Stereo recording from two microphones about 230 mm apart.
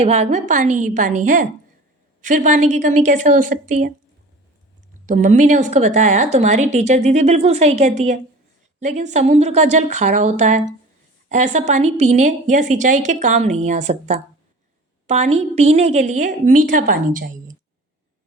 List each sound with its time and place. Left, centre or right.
0.0 s a woman's voice: right
5.0 s a woman's voice: right